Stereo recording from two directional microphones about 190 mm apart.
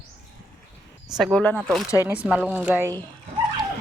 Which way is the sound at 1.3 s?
10° left (ahead or behind).